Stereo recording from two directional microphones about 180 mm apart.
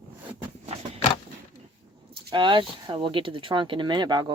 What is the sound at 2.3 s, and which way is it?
Speech, 25° right (ahead or behind).